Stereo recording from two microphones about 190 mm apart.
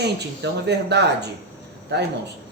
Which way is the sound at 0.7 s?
60° right (ahead or behind).